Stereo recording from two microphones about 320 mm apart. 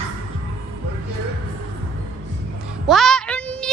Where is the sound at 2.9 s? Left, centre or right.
Centre.